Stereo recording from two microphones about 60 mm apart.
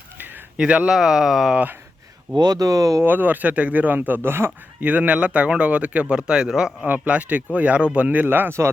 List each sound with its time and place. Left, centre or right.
0.5 s speech: right
2.5 s speech: right
3.0 s speech: right
4.8 s speech: right
6.8 s speech: right